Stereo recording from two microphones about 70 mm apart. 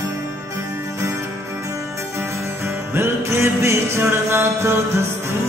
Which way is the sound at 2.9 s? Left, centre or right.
Right.